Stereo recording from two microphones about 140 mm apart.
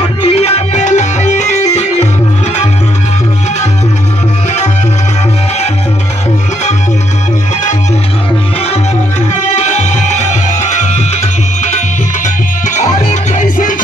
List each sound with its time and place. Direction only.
0.3 s music: 50° left (ahead or behind)
9.4 s music: 55° left (ahead or behind)
13.1 s music: 65° left (ahead or behind)